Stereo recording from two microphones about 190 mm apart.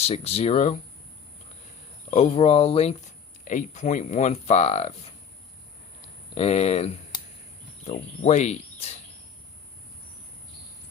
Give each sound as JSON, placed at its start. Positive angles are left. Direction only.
{"t": 0.0, "sound": "speech", "side_deg": 30}
{"t": 2.0, "sound": "speech", "side_deg": 35}
{"t": 3.4, "sound": "speech", "side_deg": 40}
{"t": 6.3, "sound": "speech", "side_deg": 35}